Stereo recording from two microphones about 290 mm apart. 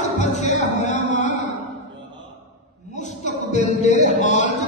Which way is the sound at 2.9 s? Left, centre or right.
Left.